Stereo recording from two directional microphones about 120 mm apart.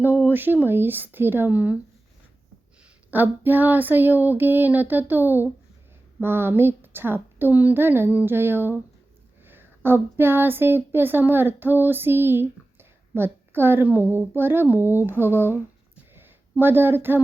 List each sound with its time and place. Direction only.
0.3 s speech: 15° right (ahead or behind)
3.1 s speech: 15° right (ahead or behind)
16.1 s a sound: 20° right (ahead or behind)